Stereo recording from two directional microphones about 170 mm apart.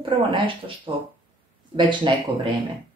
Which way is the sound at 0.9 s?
30° right (ahead or behind).